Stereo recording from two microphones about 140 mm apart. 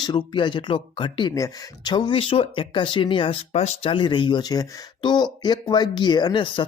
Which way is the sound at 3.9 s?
35° left (ahead or behind).